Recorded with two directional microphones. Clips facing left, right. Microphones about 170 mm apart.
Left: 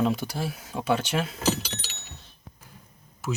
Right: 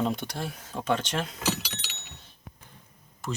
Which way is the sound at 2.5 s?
65° right (ahead or behind).